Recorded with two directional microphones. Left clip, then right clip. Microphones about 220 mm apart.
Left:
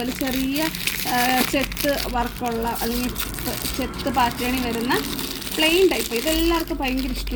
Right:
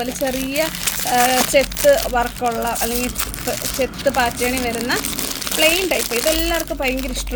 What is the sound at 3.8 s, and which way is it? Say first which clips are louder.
Speech: right 4 dB; 50° right (ahead or behind).